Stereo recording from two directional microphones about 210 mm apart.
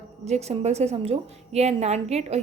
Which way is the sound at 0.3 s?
30° right (ahead or behind).